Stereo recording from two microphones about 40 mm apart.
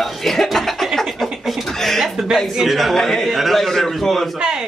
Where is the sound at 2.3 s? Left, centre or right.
Centre.